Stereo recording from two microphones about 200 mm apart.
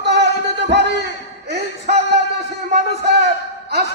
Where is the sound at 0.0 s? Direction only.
60° right (ahead or behind).